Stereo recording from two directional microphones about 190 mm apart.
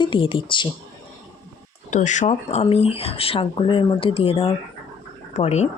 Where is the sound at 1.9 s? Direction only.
40° left (ahead or behind).